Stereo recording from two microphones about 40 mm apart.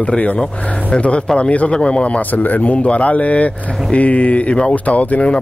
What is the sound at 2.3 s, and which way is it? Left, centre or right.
Speech, left.